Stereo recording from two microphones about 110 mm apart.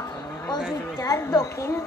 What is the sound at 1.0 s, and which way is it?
Speech, 30° left (ahead or behind).